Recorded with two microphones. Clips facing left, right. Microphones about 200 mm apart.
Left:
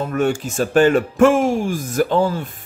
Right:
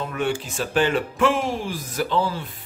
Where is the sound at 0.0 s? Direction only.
45° left (ahead or behind).